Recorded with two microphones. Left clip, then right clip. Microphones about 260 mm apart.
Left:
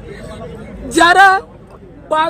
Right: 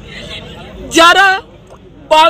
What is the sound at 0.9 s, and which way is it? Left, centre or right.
Speech, centre.